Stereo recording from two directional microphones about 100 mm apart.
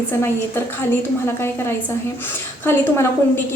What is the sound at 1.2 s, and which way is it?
Speech, 25° left (ahead or behind).